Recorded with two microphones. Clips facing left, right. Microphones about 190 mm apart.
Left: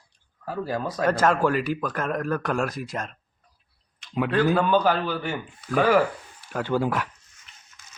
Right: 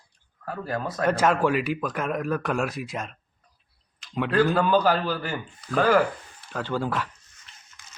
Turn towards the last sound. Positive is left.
turn(degrees=10)  # may be behind; listen again after turning